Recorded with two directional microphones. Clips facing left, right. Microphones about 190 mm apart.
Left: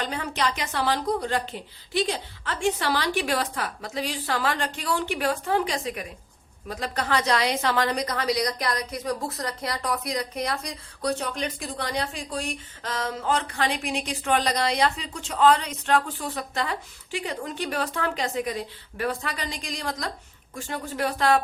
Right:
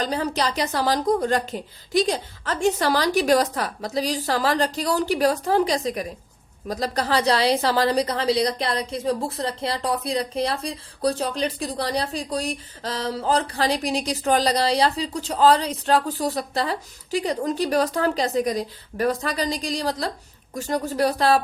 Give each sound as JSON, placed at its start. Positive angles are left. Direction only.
{"t": 0.0, "sound": "a woman's voice", "side_deg": -35}